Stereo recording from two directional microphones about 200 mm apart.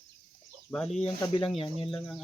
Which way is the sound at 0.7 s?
5° left (ahead or behind).